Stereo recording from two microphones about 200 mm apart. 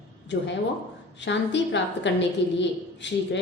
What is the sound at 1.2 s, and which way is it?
A woman's voice, 60° left (ahead or behind).